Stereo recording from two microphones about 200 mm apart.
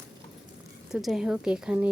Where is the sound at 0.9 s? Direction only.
Centre (ahead or behind).